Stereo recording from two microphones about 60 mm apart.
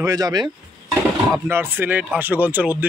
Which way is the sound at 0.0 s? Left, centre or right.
Right.